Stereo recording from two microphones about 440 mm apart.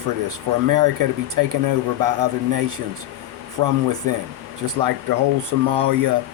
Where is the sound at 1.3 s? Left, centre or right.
Right.